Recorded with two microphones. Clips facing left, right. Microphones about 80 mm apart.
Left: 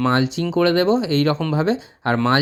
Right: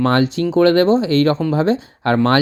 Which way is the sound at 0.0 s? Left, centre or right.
Right.